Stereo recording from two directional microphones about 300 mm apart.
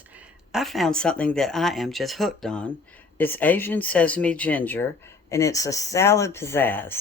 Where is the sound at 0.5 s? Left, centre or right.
Centre.